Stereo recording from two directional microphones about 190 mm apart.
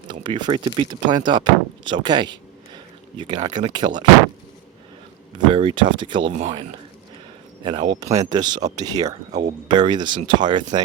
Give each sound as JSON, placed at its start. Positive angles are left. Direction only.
{"t": 0.1, "sound": "speech", "side_deg": -25}
{"t": 5.5, "sound": "speech", "side_deg": -25}